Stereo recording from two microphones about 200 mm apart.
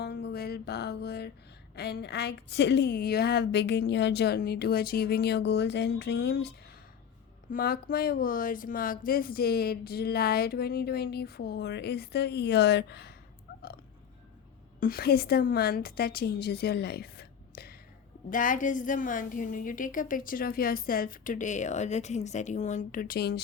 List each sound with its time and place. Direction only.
0.0 s music: 55° left (ahead or behind)
1.7 s a woman's voice: 55° left (ahead or behind)
7.5 s speech: 45° left (ahead or behind)
14.8 s a woman's voice: 50° left (ahead or behind)